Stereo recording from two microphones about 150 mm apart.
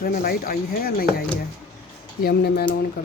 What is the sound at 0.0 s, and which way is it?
Speech, 90° left.